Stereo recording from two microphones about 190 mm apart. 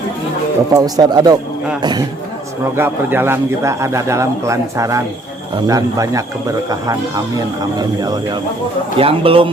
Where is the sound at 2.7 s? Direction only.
10° right (ahead or behind).